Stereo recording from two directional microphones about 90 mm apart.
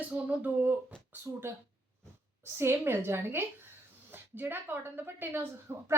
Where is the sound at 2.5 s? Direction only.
25° right (ahead or behind).